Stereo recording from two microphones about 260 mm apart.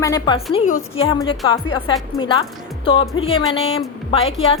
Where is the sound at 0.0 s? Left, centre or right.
Centre.